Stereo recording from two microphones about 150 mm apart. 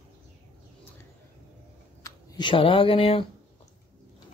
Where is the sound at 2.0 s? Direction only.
30° left (ahead or behind).